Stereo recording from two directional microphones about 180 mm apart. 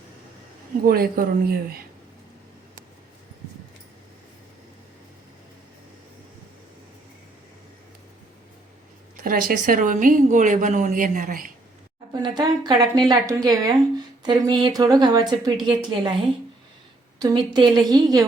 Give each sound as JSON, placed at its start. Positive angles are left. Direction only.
{"t": 0.9, "sound": "speech", "side_deg": -55}
{"t": 9.2, "sound": "a woman's voice", "side_deg": -55}
{"t": 12.1, "sound": "a woman's voice", "side_deg": -25}
{"t": 17.2, "sound": "a woman's voice", "side_deg": -25}